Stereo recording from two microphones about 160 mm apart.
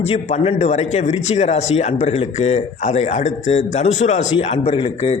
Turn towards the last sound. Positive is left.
turn(degrees=35)  # may be behind; listen again after turning